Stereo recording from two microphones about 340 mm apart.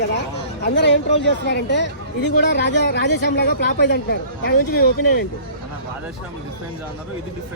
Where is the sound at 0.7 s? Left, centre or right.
Left.